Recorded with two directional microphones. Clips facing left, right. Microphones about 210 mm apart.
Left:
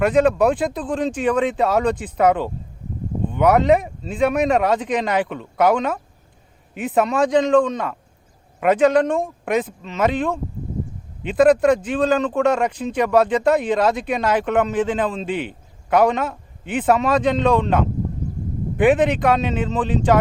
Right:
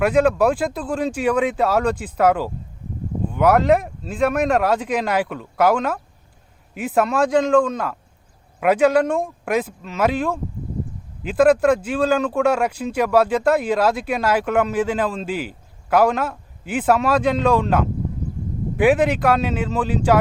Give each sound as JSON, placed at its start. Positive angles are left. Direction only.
{"t": 0.0, "sound": "speech", "side_deg": -5}